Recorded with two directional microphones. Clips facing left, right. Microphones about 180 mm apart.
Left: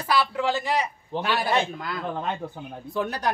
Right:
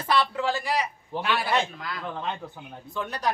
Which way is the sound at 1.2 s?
40° left (ahead or behind).